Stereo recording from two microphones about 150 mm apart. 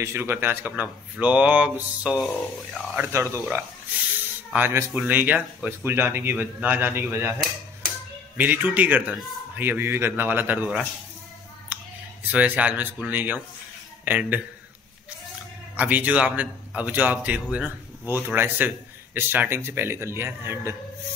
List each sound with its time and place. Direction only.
0.0 s a man's voice: 15° right (ahead or behind); by 3.0 s 5° left (ahead or behind)
3.0 s a man's voice: 20° right (ahead or behind)
4.5 s a man's voice: 15° right (ahead or behind)
8.4 s a man's voice: 10° right (ahead or behind)
11.7 s a sound: 10° right (ahead or behind)
12.3 s a man's voice: 10° right (ahead or behind)
15.7 s a man's voice: 10° right (ahead or behind)